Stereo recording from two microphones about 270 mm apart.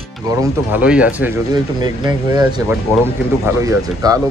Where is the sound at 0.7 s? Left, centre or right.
Centre.